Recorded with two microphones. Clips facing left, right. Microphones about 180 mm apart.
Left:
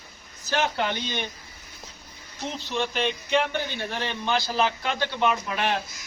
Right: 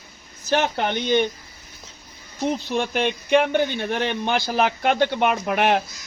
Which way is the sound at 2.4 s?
50° right (ahead or behind).